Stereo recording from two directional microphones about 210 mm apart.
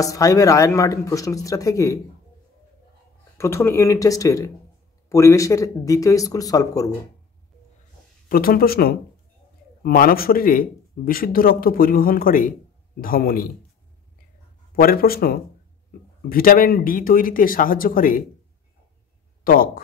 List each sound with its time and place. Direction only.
0.0 s speech: 15° left (ahead or behind)
3.3 s speech: 10° left (ahead or behind)
8.3 s speech: 45° left (ahead or behind)
14.8 s speech: 45° left (ahead or behind)
19.4 s speech: 45° left (ahead or behind)